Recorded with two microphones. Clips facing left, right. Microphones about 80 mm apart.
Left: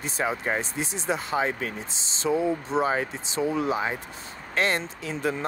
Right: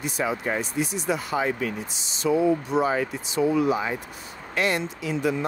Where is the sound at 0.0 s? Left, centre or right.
Left.